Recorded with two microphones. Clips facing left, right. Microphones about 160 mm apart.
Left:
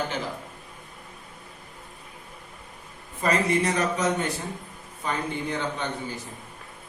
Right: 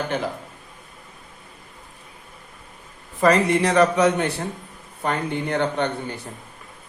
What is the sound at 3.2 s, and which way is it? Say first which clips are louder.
A man's voice: right 6 dB; 75° right (ahead or behind).